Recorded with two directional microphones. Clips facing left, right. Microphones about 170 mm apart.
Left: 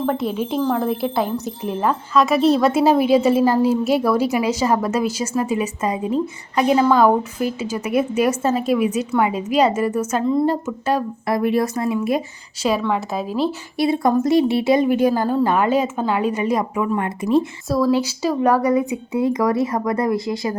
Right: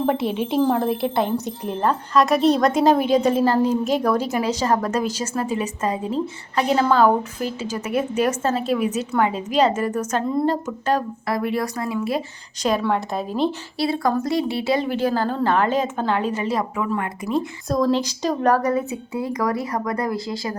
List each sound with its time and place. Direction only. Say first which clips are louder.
0.1 s speech: even; centre (ahead or behind)
11.3 s speech: left 5 dB; 25° left (ahead or behind)
12.9 s speech: left 1 dB; 5° left (ahead or behind)
13.7 s speech: left 6 dB; 20° left (ahead or behind)
17.8 s speech: left 3 dB; 10° left (ahead or behind)